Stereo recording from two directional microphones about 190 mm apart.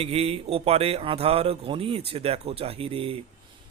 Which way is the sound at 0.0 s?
30° right (ahead or behind).